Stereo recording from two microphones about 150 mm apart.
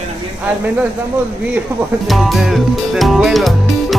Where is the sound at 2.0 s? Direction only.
Centre (ahead or behind).